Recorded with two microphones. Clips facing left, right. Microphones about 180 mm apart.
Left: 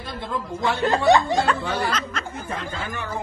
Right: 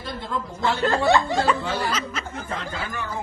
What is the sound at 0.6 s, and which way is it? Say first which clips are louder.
Speech: even; 15° left (ahead or behind).